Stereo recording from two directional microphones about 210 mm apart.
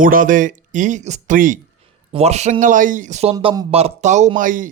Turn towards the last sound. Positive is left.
turn(degrees=-40)  # may be behind; listen again after turning